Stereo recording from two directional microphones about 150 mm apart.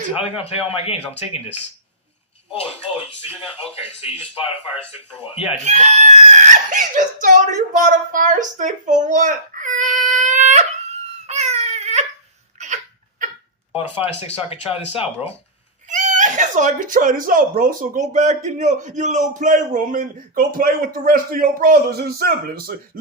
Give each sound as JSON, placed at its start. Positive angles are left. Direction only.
{"t": 0.2, "sound": "a man's voice", "side_deg": 40}
{"t": 5.6, "sound": "speech", "side_deg": -50}
{"t": 11.3, "sound": "baby cry", "side_deg": -45}
{"t": 12.5, "sound": "hiccup", "side_deg": -55}
{"t": 14.7, "sound": "a man's voice", "side_deg": 40}
{"t": 15.9, "sound": "speech", "side_deg": -55}